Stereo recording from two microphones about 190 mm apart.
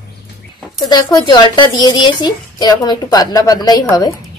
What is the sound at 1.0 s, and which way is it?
A woman's voice, 20° left (ahead or behind).